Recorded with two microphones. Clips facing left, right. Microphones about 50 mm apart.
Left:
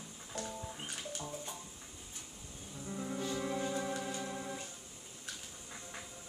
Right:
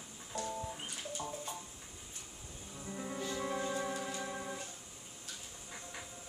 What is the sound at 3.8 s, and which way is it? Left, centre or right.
Organ, centre.